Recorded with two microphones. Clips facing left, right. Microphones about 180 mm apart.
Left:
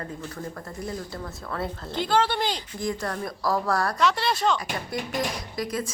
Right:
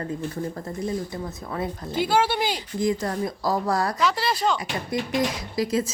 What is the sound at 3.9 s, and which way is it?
Speech, centre (ahead or behind).